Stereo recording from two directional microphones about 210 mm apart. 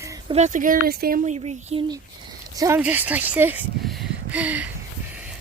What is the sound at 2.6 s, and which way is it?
Speech, 10° right (ahead or behind).